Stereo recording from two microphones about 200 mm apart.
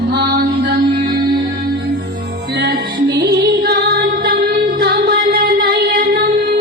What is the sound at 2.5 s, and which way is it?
Music, 55° right (ahead or behind).